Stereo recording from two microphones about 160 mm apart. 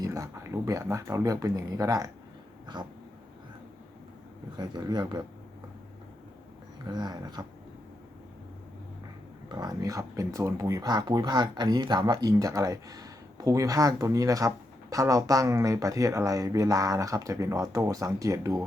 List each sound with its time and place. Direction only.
0.0 s speech: 20° right (ahead or behind)
4.5 s speech: 25° right (ahead or behind)
6.8 s speech: 25° right (ahead or behind)
9.5 s speech: 25° right (ahead or behind)